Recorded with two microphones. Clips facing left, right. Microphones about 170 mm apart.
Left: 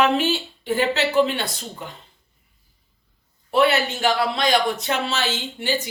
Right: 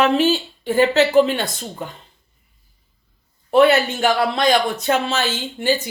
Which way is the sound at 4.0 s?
45° right (ahead or behind).